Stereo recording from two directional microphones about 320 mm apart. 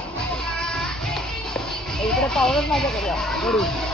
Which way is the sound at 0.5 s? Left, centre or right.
Centre.